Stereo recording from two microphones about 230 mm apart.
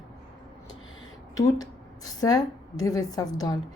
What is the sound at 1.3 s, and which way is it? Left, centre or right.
A woman's voice, centre.